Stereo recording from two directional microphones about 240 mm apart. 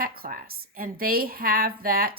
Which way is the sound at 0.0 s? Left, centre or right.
Right.